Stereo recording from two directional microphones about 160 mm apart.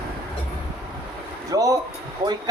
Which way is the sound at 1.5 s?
20° right (ahead or behind).